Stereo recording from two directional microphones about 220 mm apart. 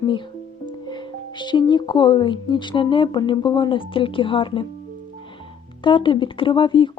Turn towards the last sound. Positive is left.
turn(degrees=20)  # may be behind; listen again after turning